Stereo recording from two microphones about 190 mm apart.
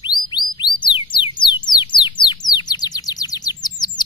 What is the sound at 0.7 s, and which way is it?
Music, 25° left (ahead or behind).